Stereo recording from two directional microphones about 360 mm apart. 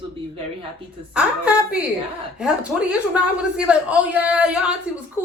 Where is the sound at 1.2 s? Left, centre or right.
Centre.